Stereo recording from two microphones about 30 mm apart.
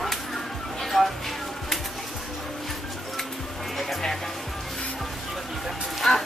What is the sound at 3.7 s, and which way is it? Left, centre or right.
Music, centre.